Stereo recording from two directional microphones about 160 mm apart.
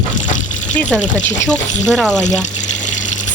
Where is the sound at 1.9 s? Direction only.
Centre (ahead or behind).